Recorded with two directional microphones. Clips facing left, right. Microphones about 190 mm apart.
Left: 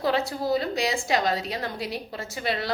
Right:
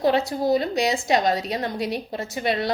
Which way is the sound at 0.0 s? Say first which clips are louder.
Right 5 dB; 20° right (ahead or behind).